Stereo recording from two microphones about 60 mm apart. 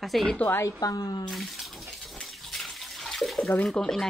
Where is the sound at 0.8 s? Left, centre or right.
Left.